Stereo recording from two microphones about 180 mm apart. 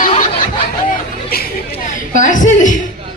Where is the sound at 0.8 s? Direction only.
60° left (ahead or behind).